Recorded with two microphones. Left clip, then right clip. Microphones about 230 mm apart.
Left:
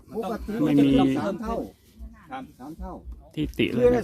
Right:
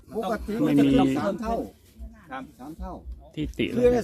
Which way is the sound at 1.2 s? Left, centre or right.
Centre.